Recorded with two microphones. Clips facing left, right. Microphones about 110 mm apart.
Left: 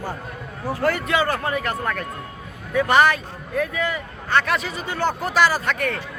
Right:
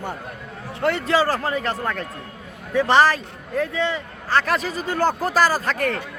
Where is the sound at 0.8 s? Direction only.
25° right (ahead or behind).